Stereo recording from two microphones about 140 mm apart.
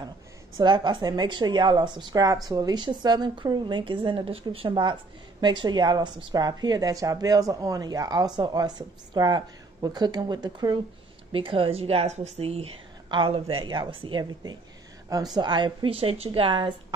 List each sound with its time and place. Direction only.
0.6 s a woman's voice: 35° right (ahead or behind)
11.3 s a woman's voice: 40° right (ahead or behind)